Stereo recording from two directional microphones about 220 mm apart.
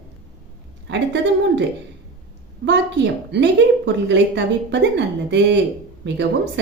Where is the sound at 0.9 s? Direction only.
55° right (ahead or behind).